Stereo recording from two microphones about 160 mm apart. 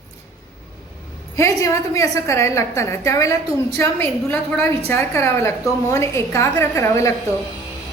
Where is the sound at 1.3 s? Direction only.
20° left (ahead or behind).